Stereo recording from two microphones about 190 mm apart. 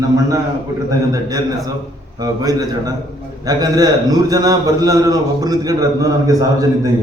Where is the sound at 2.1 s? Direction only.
20° right (ahead or behind).